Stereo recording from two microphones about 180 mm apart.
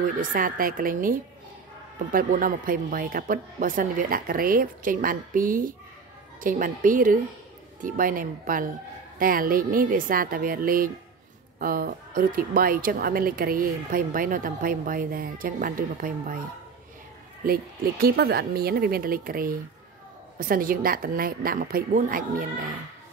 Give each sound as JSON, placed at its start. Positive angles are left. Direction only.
{"t": 0.2, "sound": "a woman's voice", "side_deg": -50}
{"t": 17.5, "sound": "a woman's voice", "side_deg": -55}